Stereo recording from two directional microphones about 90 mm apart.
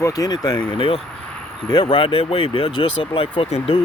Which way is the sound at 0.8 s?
90° left.